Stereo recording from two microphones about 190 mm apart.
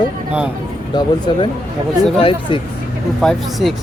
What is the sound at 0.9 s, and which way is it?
Speech, 25° left (ahead or behind).